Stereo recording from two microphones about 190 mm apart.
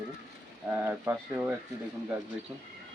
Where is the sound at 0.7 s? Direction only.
10° right (ahead or behind).